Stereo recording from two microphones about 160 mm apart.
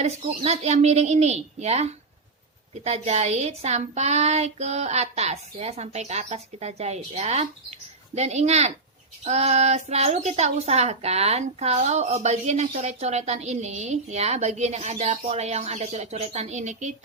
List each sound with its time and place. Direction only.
0.0 s speech: 40° right (ahead or behind)